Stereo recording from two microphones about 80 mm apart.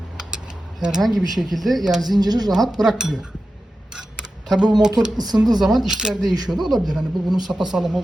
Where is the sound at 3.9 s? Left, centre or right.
Centre.